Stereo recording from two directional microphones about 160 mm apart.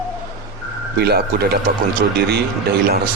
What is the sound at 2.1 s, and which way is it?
Speech, 90° right.